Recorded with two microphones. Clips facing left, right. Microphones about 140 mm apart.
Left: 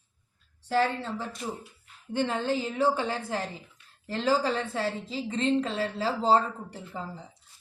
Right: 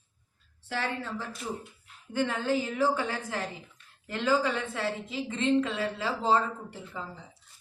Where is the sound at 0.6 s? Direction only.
30° left (ahead or behind).